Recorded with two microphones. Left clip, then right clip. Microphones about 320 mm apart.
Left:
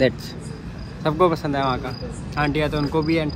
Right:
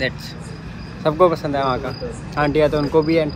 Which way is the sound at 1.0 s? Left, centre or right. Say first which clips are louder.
Right 4 dB; centre.